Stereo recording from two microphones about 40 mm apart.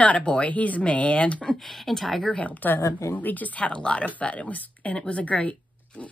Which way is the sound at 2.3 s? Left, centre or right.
Left.